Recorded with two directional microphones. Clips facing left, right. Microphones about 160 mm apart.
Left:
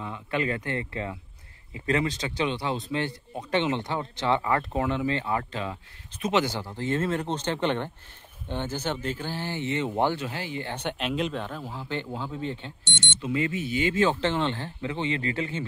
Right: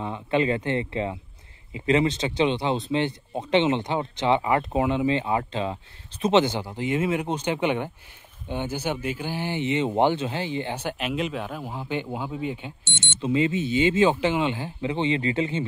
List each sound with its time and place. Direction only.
0.0 s speech: 25° right (ahead or behind)
10.7 s speech: 5° right (ahead or behind)
13.2 s speech: 25° right (ahead or behind)